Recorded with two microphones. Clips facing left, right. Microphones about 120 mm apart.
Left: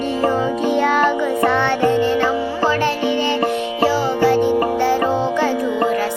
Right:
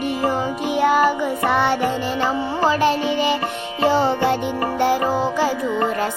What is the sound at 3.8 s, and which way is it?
Music, 20° right (ahead or behind).